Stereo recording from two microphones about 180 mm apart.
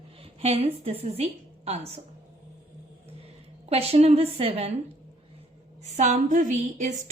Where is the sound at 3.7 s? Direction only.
35° right (ahead or behind).